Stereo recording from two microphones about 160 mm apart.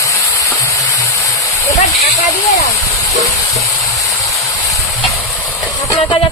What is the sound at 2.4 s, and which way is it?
Speech, 20° left (ahead or behind).